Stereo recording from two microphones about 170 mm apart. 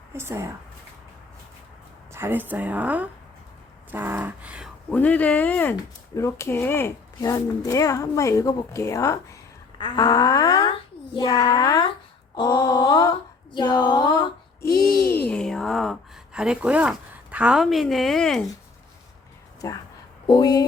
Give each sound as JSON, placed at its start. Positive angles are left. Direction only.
{"t": 0.2, "sound": "speech", "side_deg": -15}
{"t": 2.1, "sound": "speech", "side_deg": -10}
{"t": 3.9, "sound": "a sound", "side_deg": -10}
{"t": 4.9, "sound": "a child's voice", "side_deg": 10}
{"t": 14.8, "sound": "speech", "side_deg": 65}
{"t": 15.3, "sound": "speech", "side_deg": 5}
{"t": 19.6, "sound": "a child's voice", "side_deg": 20}